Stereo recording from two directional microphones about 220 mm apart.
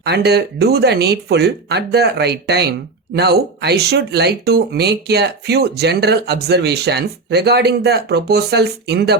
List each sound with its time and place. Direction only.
0.0 s speech: 50° right (ahead or behind)